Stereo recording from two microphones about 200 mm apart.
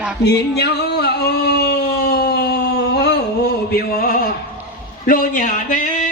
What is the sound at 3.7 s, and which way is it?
Music, 50° left (ahead or behind).